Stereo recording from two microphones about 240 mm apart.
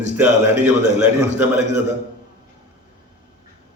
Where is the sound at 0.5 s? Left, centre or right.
Right.